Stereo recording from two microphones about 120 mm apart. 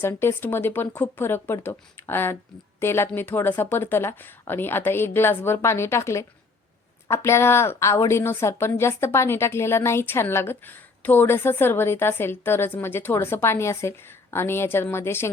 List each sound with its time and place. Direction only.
0.0 s a woman's voice: 20° left (ahead or behind)